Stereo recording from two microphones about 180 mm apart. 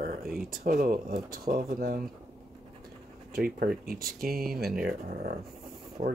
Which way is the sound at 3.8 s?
55° right (ahead or behind).